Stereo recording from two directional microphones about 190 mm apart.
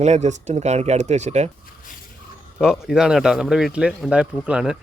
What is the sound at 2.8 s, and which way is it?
Speech, 5° right (ahead or behind).